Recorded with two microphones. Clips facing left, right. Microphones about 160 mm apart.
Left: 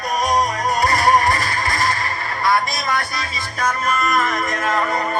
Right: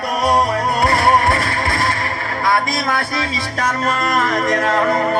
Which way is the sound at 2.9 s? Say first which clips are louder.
Right 4 dB; 80° right.